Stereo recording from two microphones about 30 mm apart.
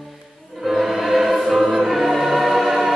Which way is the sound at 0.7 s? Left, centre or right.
Centre.